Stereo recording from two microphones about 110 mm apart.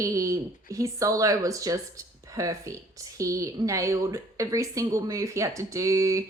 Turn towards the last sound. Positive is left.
turn(degrees=-30)  # may be behind; listen again after turning